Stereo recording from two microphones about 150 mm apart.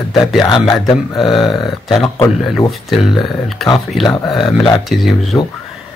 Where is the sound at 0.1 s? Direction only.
Centre (ahead or behind).